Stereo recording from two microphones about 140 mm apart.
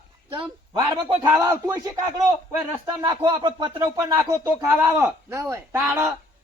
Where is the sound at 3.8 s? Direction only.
25° right (ahead or behind).